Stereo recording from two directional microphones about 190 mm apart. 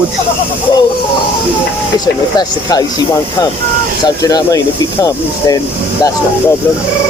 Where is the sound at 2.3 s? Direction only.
20° left (ahead or behind).